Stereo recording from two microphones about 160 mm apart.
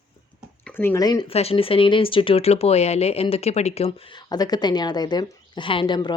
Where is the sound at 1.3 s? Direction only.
40° left (ahead or behind).